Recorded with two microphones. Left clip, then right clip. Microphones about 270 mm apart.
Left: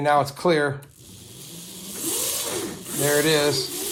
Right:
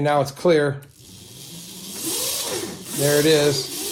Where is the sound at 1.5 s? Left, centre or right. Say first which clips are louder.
Right 2 dB; centre.